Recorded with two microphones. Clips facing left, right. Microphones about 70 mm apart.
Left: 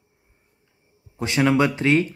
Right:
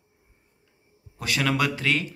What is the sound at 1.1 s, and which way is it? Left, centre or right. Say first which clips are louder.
Speech: left 6 dB; left.